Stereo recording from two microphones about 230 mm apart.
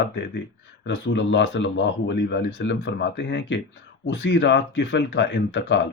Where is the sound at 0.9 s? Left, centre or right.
Left.